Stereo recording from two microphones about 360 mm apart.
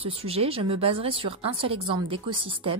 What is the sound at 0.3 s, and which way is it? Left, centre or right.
A woman's voice, centre.